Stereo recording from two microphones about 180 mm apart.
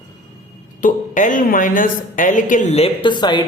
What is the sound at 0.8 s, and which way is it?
A woman's voice, 45° left (ahead or behind).